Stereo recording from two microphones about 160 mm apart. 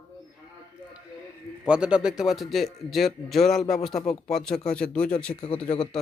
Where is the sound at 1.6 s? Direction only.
5° right (ahead or behind).